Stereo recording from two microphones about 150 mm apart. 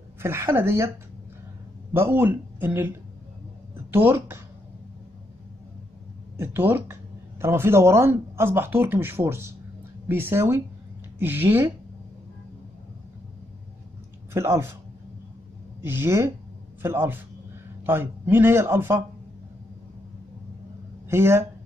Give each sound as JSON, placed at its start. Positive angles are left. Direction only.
{"t": 0.2, "sound": "speech", "side_deg": -15}
{"t": 2.0, "sound": "speech", "side_deg": -15}
{"t": 6.3, "sound": "speech", "side_deg": -15}
{"t": 14.3, "sound": "speech", "side_deg": -15}
{"t": 15.8, "sound": "speech", "side_deg": -15}
{"t": 21.1, "sound": "speech", "side_deg": -15}